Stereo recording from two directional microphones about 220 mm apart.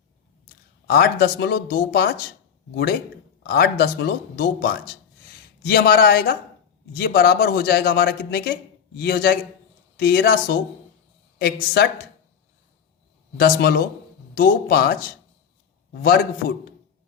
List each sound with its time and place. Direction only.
0.9 s a man's voice: 45° left (ahead or behind)
3.4 s a man's voice: 45° left (ahead or behind)
13.3 s a man's voice: 45° left (ahead or behind)